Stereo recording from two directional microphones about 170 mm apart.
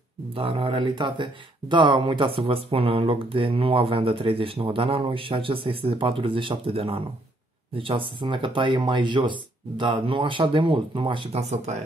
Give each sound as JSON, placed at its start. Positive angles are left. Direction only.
{"t": 0.3, "sound": "speech", "side_deg": -35}